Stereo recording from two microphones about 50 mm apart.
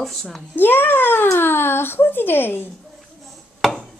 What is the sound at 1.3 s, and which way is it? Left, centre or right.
Speech, left.